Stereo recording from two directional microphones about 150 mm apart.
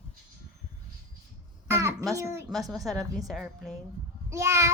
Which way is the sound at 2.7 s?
Centre (ahead or behind).